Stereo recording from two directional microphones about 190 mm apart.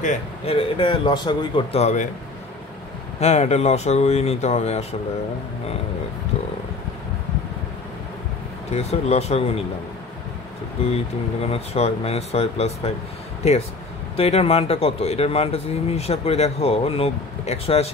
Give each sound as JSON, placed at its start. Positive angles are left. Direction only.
{"t": 0.0, "sound": "speech", "side_deg": 35}
{"t": 3.2, "sound": "speech", "side_deg": 35}
{"t": 8.7, "sound": "speech", "side_deg": 35}
{"t": 11.4, "sound": "speech", "side_deg": 35}